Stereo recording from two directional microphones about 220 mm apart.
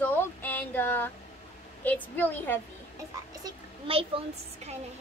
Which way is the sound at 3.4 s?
25° right (ahead or behind).